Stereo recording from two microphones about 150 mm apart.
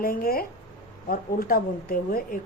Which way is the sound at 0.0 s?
75° left (ahead or behind).